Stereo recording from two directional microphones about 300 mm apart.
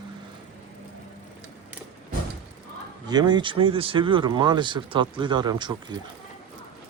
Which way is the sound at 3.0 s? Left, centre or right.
Centre.